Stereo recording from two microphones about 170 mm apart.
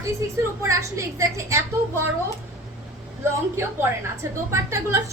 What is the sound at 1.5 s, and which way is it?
Speech, 15° right (ahead or behind).